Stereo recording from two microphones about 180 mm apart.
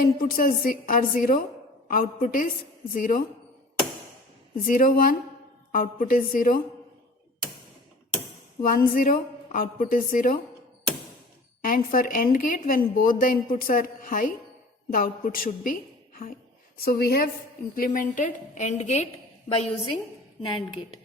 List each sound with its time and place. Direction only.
0.0 s a woman's voice: 50° left (ahead or behind)
4.5 s a woman's voice: 50° left (ahead or behind)
8.6 s a woman's voice: 55° left (ahead or behind)
11.6 s a woman's voice: 50° left (ahead or behind)